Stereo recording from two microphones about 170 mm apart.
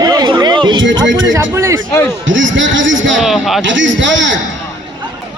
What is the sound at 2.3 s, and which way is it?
Speech, 90° right.